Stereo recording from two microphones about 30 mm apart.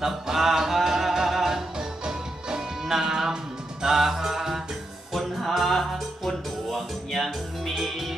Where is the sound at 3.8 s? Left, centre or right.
Centre.